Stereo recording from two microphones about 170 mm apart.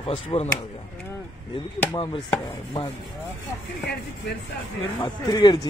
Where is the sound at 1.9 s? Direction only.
30° left (ahead or behind).